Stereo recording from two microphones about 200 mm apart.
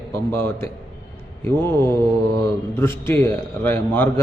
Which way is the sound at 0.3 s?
10° left (ahead or behind).